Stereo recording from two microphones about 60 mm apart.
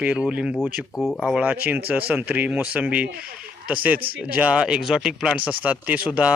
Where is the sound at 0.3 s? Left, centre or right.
Centre.